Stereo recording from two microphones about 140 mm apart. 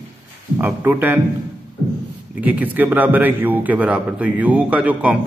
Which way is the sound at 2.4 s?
10° right (ahead or behind).